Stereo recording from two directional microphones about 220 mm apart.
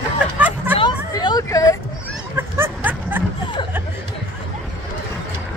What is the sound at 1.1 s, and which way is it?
Hubbub, 15° left (ahead or behind).